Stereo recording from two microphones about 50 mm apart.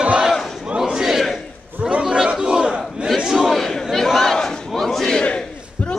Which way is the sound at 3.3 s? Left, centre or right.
Centre.